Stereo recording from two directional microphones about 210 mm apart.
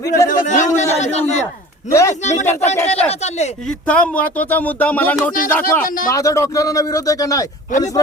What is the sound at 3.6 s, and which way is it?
Speech, 5° left (ahead or behind).